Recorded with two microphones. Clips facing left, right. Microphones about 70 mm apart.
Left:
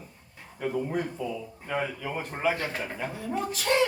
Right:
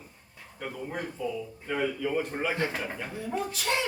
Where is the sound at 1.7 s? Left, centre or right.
Left.